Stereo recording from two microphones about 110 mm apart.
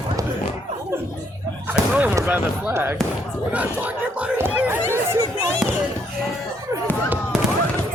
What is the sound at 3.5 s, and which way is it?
Snicker, 15° right (ahead or behind).